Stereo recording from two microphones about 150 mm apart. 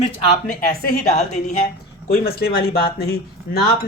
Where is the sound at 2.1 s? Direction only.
90° left.